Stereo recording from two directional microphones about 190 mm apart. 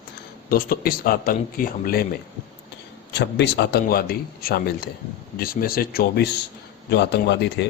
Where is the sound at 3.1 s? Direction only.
65° left (ahead or behind).